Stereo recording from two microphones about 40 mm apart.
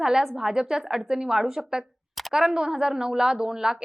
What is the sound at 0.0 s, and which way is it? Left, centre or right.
A woman's voice, centre.